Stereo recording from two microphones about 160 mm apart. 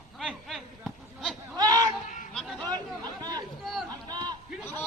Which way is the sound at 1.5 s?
25° right (ahead or behind).